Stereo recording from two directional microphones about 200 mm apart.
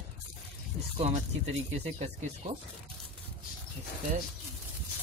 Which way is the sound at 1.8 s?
35° right (ahead or behind).